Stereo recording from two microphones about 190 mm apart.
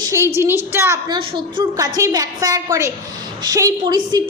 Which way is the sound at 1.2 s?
25° right (ahead or behind).